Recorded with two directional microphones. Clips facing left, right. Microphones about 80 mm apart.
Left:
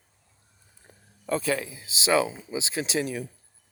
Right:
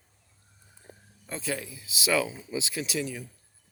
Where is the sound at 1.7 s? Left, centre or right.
Left.